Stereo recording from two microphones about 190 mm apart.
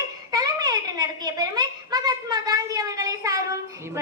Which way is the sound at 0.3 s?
20° right (ahead or behind).